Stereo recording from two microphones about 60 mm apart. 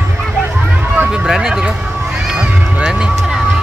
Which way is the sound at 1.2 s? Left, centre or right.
Centre.